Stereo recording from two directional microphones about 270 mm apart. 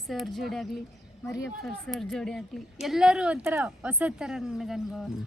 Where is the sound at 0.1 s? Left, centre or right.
Centre.